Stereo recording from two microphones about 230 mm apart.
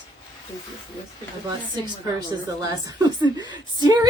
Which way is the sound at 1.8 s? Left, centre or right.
Centre.